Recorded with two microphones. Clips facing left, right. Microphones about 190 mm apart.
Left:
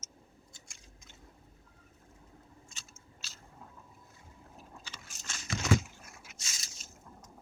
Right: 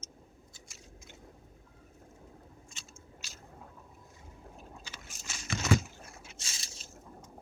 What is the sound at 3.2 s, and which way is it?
Squish, 15° right (ahead or behind).